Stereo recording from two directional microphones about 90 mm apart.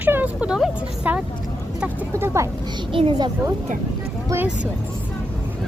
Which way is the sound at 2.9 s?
75° right (ahead or behind).